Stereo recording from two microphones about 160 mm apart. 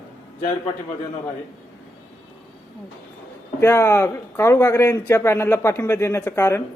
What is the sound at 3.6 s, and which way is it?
Speech, 15° left (ahead or behind).